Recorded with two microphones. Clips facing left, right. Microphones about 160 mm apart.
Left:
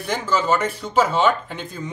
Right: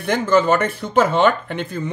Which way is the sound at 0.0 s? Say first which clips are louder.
Right 6 dB; 55° right (ahead or behind).